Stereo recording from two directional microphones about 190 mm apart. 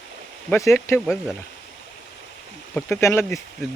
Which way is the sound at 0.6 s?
15° left (ahead or behind).